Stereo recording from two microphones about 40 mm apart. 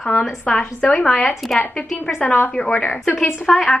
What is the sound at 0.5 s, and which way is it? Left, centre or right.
Speech, left.